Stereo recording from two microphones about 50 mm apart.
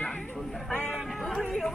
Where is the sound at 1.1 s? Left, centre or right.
Centre.